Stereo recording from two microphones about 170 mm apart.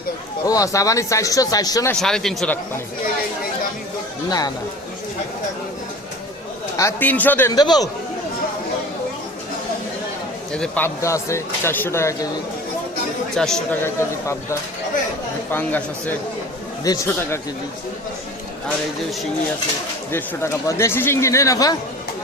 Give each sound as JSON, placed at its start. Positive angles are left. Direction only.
{"t": 0.4, "sound": "speech", "side_deg": 20}
{"t": 1.9, "sound": "speech", "side_deg": 5}
{"t": 4.3, "sound": "speech", "side_deg": 25}
{"t": 6.7, "sound": "speech", "side_deg": 15}
{"t": 7.5, "sound": "speech", "side_deg": 25}
{"t": 10.5, "sound": "speech", "side_deg": 10}
{"t": 13.3, "sound": "speech", "side_deg": 5}
{"t": 13.8, "sound": "speech", "side_deg": 15}
{"t": 20.1, "sound": "speech", "side_deg": 15}